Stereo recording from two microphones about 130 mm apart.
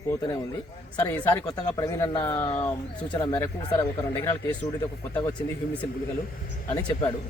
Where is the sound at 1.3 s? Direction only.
30° left (ahead or behind).